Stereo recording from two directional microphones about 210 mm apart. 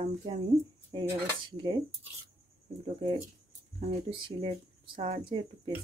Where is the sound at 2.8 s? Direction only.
25° right (ahead or behind).